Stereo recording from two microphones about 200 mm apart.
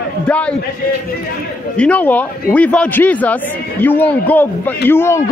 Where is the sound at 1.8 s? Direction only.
5° left (ahead or behind).